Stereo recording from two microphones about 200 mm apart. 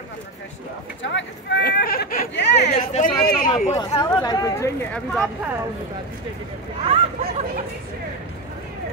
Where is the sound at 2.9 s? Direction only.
45° left (ahead or behind).